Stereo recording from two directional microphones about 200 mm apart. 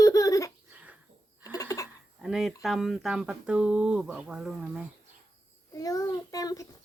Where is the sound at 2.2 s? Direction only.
Centre (ahead or behind).